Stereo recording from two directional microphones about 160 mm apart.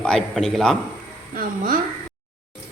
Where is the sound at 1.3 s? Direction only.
65° right (ahead or behind).